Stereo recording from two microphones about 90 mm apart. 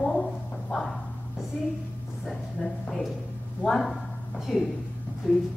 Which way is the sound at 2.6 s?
10° left (ahead or behind).